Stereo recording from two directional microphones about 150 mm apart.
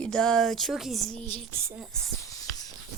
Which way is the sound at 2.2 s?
20° left (ahead or behind).